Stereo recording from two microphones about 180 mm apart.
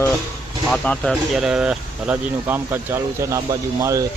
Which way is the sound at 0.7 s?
5° left (ahead or behind).